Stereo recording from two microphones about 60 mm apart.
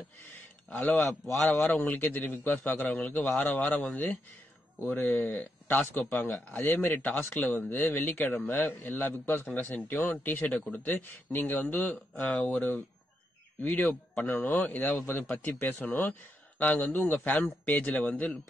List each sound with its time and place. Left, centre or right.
0.9 s a man's voice: centre
1.3 s a man's voice: centre
1.9 s a man's voice: left
4.9 s a man's voice: left
13.6 s a man's voice: left